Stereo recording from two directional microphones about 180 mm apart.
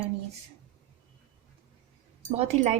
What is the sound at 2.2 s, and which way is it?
Speech, 40° right (ahead or behind).